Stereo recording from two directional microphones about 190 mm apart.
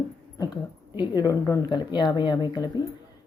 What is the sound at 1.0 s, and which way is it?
Speech, 20° left (ahead or behind).